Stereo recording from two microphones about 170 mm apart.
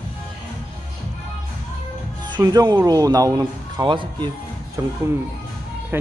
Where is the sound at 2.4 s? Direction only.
20° right (ahead or behind).